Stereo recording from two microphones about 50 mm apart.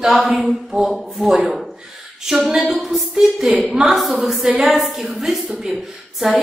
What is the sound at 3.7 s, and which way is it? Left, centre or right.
Speech, centre.